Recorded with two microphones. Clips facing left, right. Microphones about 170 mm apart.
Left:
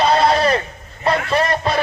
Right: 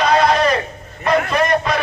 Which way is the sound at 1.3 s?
30° left (ahead or behind).